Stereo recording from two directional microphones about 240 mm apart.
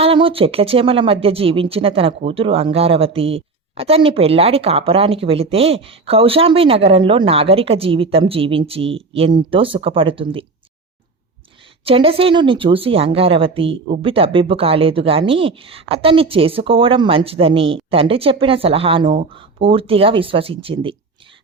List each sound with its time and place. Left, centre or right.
0.0 s speech: right
11.9 s speech: right